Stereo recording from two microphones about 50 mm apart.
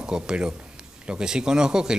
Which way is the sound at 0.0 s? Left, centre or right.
Centre.